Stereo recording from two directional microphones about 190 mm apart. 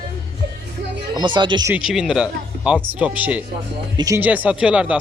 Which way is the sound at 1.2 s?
25° right (ahead or behind).